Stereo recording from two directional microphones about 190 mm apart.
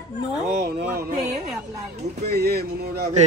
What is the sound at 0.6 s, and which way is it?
Speech, 55° right (ahead or behind).